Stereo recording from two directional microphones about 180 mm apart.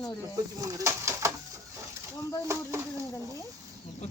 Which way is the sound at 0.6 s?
20° right (ahead or behind).